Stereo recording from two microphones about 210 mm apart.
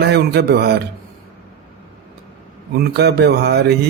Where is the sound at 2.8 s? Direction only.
50° right (ahead or behind).